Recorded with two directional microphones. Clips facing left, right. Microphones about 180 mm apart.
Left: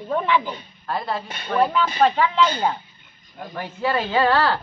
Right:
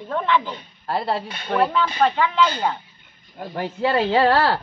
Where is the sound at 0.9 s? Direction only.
30° right (ahead or behind).